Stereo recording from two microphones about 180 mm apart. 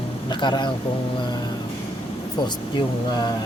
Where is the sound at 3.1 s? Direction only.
25° left (ahead or behind).